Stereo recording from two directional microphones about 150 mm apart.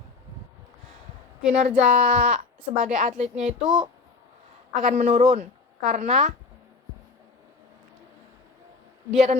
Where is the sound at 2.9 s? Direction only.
50° right (ahead or behind).